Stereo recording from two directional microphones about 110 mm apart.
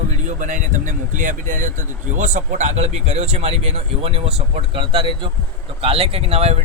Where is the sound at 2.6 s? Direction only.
90° right; by 5.3 s 50° right (ahead or behind).